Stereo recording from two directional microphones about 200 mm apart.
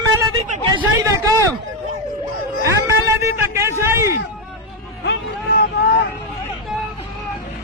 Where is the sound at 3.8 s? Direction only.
15° right (ahead or behind).